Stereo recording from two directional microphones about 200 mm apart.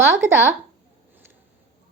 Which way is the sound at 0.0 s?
10° right (ahead or behind).